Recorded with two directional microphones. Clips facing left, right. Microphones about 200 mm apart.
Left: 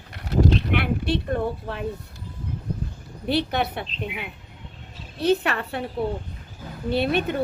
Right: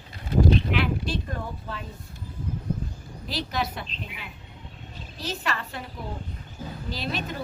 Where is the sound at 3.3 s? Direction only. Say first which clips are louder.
Left 7 dB; 60° left (ahead or behind).